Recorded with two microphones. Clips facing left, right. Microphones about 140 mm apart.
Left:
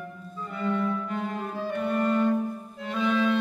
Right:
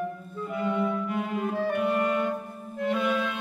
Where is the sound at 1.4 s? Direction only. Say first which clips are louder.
Right 4 dB; 60° right (ahead or behind).